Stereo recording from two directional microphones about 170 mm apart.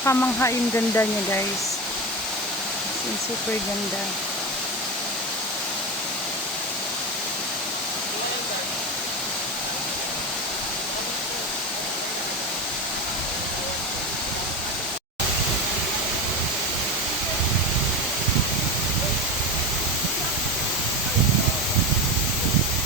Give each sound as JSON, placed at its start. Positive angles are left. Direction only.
{"t": 0.0, "sound": "speech", "side_deg": 15}